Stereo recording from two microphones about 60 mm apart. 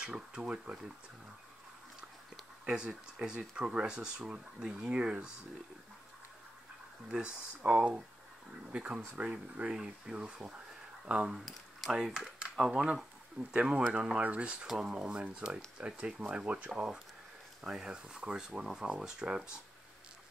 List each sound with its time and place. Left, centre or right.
0.0 s speech: centre
2.6 s speech: centre
7.1 s speech: centre
8.7 s speech: right
11.4 s speech: centre; by 16.8 s right
17.6 s speech: centre